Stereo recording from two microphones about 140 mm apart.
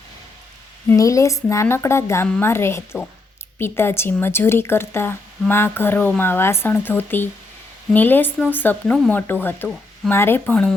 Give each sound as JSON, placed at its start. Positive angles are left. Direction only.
{"t": 0.9, "sound": "speech", "side_deg": 25}